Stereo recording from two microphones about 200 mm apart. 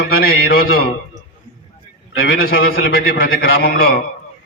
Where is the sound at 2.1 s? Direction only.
50° left (ahead or behind).